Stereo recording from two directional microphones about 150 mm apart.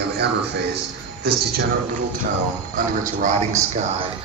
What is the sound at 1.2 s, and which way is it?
Speech, 90° right.